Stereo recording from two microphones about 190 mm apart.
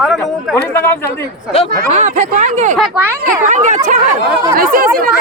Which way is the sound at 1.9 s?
40° right (ahead or behind).